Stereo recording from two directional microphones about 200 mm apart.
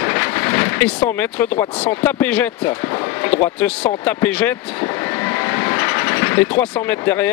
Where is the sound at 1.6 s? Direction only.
10° left (ahead or behind).